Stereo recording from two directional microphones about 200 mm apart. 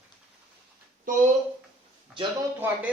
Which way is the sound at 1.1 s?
40° right (ahead or behind).